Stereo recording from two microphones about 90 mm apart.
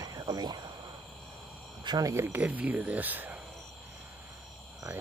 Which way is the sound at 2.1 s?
35° right (ahead or behind).